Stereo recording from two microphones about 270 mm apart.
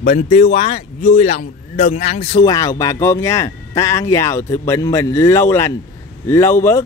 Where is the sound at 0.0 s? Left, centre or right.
Left.